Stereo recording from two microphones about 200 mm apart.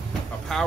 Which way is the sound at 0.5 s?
Centre (ahead or behind).